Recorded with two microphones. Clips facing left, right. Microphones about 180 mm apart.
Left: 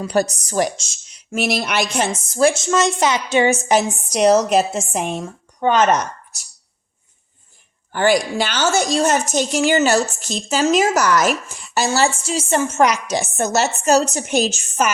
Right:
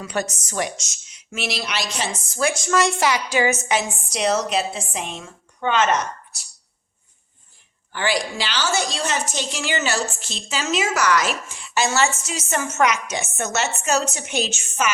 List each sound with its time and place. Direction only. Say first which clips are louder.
0.0 s speech: left 7 dB; 35° left (ahead or behind)
1.4 s a woman's voice: left 7 dB; 50° left (ahead or behind)
2.4 s a woman's voice: left 4 dB; 25° left (ahead or behind)
7.9 s a woman's voice: left 7 dB; 45° left (ahead or behind)